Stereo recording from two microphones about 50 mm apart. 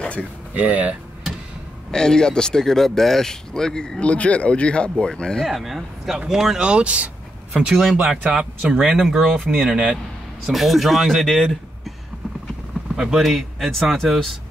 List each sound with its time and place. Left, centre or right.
0.6 s speech: right
1.9 s speech: centre
4.0 s speech: left
5.5 s speech: centre
6.7 s speech: right; by 11.9 s centre
12.9 s speech: centre